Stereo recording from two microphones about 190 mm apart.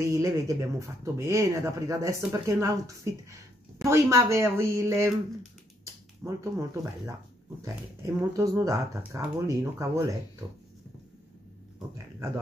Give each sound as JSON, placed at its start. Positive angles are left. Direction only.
{"t": 0.0, "sound": "speech", "side_deg": -15}
{"t": 6.2, "sound": "speech", "side_deg": -15}